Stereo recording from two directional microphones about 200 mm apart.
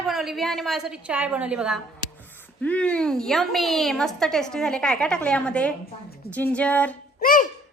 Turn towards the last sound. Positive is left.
turn(degrees=45)  # may be behind; listen again after turning